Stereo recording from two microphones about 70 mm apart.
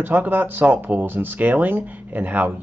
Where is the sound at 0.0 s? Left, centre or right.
Right.